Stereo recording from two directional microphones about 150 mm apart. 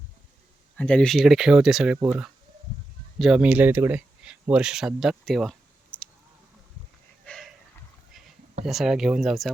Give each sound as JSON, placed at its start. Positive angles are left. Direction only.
{"t": 0.8, "sound": "speech", "side_deg": 5}
{"t": 3.2, "sound": "speech", "side_deg": -5}
{"t": 8.6, "sound": "speech", "side_deg": 0}